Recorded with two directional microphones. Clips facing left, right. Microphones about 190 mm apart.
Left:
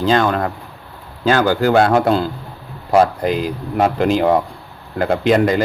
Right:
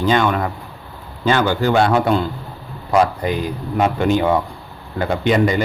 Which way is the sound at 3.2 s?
90° left.